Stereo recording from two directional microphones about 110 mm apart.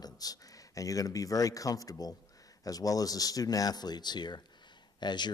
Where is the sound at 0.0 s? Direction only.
35° left (ahead or behind).